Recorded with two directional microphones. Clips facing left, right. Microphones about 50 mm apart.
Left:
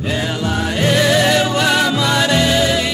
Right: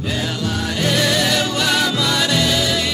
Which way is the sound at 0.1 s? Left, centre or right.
Left.